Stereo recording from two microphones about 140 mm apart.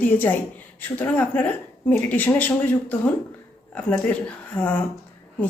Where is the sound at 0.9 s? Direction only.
10° left (ahead or behind).